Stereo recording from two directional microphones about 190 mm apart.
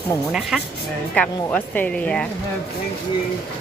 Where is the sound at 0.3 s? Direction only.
5° right (ahead or behind).